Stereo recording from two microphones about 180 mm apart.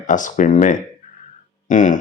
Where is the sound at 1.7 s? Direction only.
45° left (ahead or behind).